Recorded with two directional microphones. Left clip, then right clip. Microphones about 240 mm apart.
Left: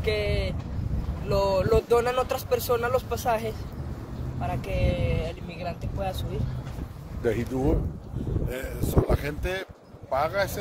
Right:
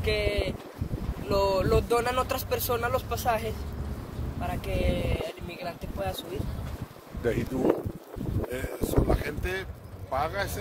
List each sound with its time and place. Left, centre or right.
0.0 s boat: centre
1.3 s speech: centre
7.2 s speech: centre
8.5 s speech: left